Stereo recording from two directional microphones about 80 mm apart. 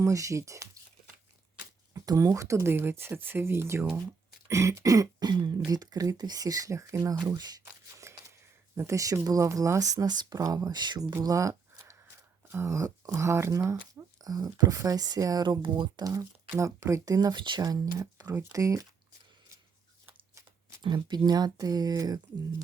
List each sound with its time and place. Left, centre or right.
0.0 s speech: right
1.9 s speech: right
5.2 s speech: right
7.3 s speech: right
8.7 s speech: right
11.2 s a sound: right
12.5 s speech: right
14.2 s speech: right
17.2 s speech: right
17.6 s speech: right
20.8 s speech: right